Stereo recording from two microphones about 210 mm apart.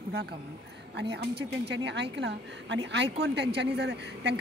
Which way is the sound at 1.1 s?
55° right (ahead or behind).